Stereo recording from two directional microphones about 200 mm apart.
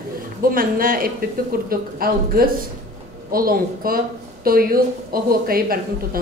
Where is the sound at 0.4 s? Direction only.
45° right (ahead or behind).